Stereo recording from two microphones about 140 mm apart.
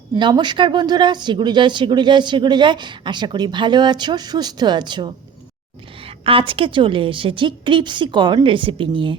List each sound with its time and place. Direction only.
0.2 s speech: 30° right (ahead or behind)